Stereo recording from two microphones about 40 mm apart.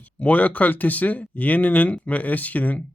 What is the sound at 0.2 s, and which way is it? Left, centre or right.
Speech, left.